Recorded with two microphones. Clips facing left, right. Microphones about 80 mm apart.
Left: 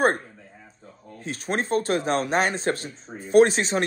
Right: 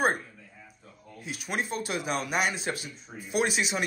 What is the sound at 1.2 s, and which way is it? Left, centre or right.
Speech, left.